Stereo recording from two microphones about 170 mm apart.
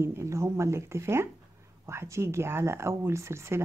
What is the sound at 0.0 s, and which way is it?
Speech, 15° right (ahead or behind).